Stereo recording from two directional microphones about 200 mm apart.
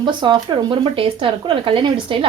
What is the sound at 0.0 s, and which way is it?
Speech, 25° right (ahead or behind).